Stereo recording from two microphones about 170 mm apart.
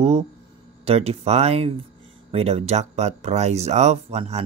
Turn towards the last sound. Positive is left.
turn(degrees=-35)  # may be behind; listen again after turning